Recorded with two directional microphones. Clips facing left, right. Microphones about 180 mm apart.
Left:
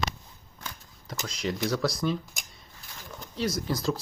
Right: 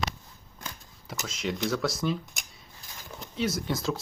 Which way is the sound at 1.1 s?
5° right (ahead or behind).